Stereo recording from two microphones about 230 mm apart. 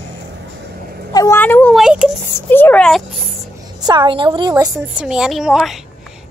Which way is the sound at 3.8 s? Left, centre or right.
Centre.